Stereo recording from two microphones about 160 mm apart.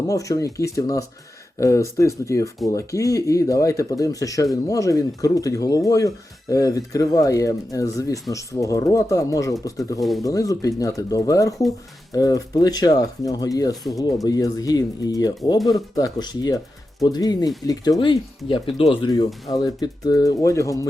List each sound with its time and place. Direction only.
0.1 s speech: 20° left (ahead or behind)
10.0 s speech: centre (ahead or behind)
10.2 s speech: 20° left (ahead or behind)
19.5 s speech: 25° left (ahead or behind)